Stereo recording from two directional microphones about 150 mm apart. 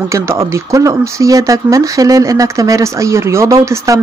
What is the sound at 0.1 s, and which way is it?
Speech, 20° right (ahead or behind).